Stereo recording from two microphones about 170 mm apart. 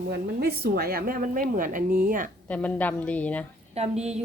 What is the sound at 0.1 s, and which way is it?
A woman's voice, 70° right (ahead or behind).